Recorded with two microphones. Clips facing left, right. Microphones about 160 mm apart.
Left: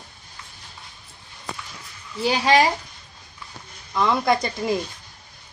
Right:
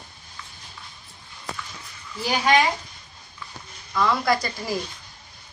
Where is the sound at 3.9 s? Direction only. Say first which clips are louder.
Left 2 dB; 20° left (ahead or behind).